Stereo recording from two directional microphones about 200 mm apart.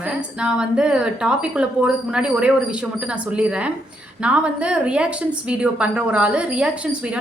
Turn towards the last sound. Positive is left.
turn(degrees=-5)  # may be behind; listen again after turning